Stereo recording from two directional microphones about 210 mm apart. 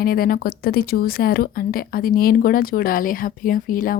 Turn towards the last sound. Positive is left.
turn(degrees=40)  # may be behind; listen again after turning